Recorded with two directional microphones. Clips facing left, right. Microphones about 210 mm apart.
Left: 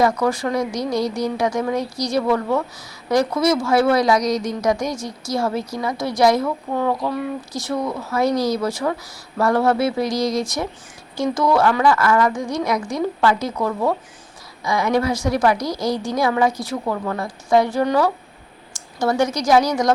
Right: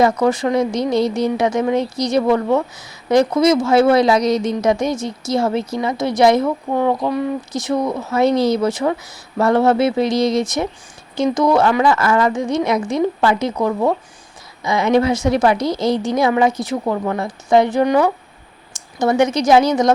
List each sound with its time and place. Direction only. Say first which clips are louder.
0.0 s speech: right 3 dB; 20° right (ahead or behind)